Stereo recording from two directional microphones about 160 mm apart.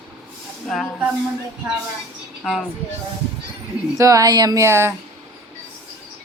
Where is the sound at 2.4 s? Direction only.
5° left (ahead or behind).